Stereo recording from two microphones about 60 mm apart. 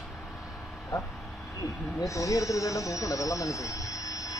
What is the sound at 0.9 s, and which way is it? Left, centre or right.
Speech, left.